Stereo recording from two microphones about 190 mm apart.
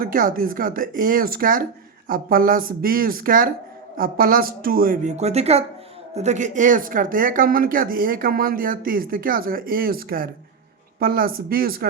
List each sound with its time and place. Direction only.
0.0 s speech: 45° right (ahead or behind)